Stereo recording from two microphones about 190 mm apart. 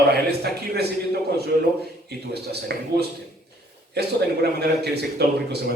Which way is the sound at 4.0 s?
60° right (ahead or behind).